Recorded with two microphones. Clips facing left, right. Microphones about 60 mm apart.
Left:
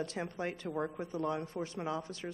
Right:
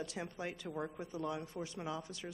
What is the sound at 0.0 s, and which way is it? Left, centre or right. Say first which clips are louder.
Speech: left 5 dB; left.